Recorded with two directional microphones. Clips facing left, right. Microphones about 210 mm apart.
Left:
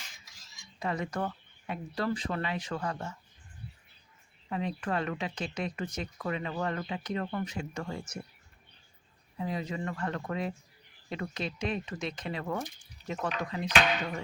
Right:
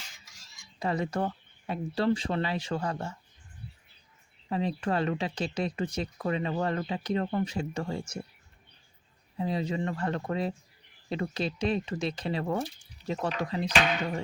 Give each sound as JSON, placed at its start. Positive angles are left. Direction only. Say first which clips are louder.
{"t": 0.8, "sound": "speech", "louder": "right 3 dB", "side_deg": -30}
{"t": 4.4, "sound": "speech", "louder": "right 4 dB", "side_deg": -30}
{"t": 9.4, "sound": "speech", "louder": "right 4 dB", "side_deg": -30}